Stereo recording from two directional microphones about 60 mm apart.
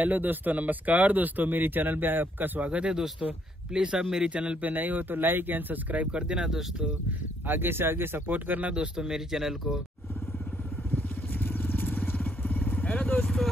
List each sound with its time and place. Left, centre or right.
0.0 s speech: right; by 6.9 s centre
7.1 s speech: right
8.7 s speech: centre
10.9 s vehicle: left